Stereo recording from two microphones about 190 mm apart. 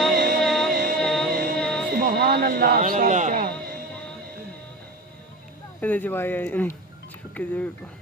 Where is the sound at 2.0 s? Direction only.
55° right (ahead or behind).